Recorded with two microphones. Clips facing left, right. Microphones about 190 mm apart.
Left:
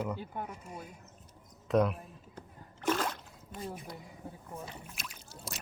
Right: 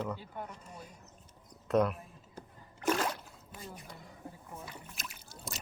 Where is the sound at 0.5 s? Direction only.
10° left (ahead or behind).